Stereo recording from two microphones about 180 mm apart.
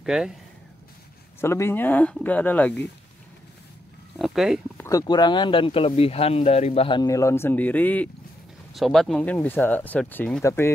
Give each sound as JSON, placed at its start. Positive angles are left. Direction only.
{"t": 0.0, "sound": "speech", "side_deg": -5}
{"t": 1.4, "sound": "speech", "side_deg": 15}
{"t": 4.2, "sound": "speech", "side_deg": 0}
{"t": 4.7, "sound": "speech", "side_deg": 20}
{"t": 7.0, "sound": "speech", "side_deg": 15}